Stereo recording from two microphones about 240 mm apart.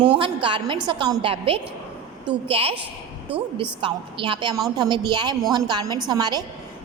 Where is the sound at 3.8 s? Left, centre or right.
Right.